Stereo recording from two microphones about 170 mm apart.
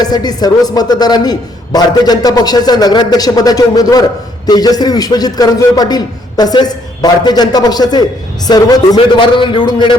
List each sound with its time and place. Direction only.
0.0 s a man's voice: 25° left (ahead or behind)